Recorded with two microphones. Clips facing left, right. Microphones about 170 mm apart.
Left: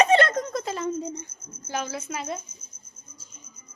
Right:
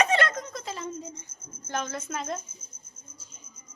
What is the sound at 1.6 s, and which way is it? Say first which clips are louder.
Speech: left 1 dB; 5° left (ahead or behind).